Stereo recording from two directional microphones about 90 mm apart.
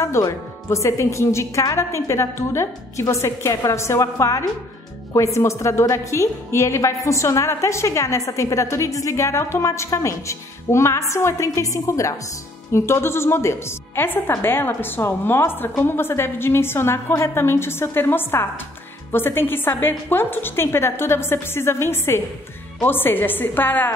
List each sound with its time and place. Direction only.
0.0 s a woman's voice: 35° left (ahead or behind)